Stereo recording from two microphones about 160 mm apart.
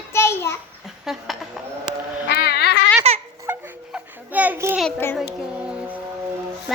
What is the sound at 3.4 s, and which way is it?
Babbling, 10° right (ahead or behind).